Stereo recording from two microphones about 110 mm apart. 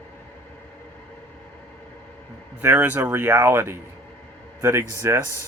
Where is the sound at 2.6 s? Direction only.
15° right (ahead or behind).